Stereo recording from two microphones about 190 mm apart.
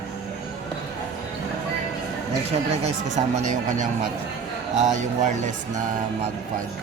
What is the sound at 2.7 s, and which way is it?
Speech, 35° right (ahead or behind).